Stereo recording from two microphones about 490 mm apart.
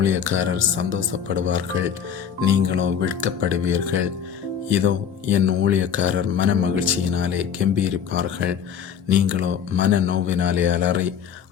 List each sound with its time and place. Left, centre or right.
0.0 s speech: right